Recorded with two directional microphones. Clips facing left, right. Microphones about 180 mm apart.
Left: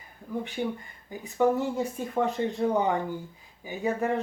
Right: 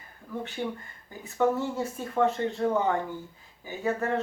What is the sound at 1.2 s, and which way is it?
Speech, 15° left (ahead or behind).